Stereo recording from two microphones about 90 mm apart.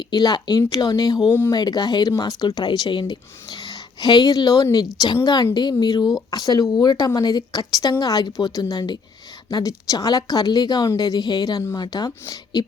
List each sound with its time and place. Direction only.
0.1 s speech: 50° left (ahead or behind)